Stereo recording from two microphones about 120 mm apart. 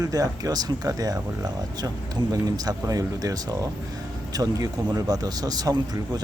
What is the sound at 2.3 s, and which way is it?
Speech, 30° right (ahead or behind).